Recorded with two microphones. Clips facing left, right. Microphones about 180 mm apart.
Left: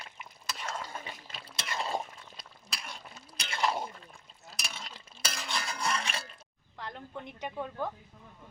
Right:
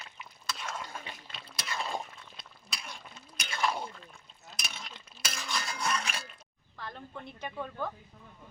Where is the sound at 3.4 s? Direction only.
25° left (ahead or behind).